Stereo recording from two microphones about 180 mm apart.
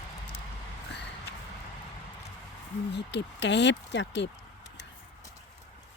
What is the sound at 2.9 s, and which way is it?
Speech, 80° left.